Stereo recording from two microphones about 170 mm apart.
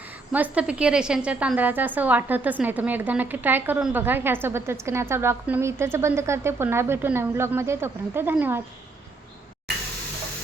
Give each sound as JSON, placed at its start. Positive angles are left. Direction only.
{"t": 0.3, "sound": "a woman's voice", "side_deg": -10}